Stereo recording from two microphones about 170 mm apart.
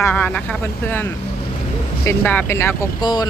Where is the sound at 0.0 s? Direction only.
10° left (ahead or behind).